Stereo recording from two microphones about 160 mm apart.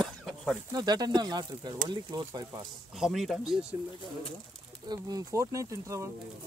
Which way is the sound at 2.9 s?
Centre (ahead or behind).